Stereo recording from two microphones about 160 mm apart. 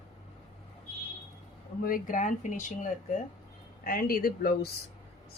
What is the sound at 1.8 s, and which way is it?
Speech, 60° left (ahead or behind).